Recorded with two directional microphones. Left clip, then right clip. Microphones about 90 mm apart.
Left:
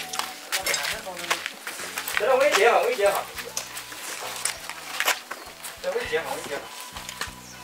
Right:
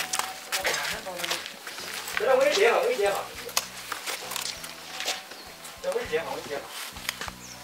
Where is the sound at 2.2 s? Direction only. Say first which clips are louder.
Left 2 dB; 10° left (ahead or behind).